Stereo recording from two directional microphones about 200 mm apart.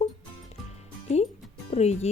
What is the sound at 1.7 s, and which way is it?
Speech, 35° left (ahead or behind).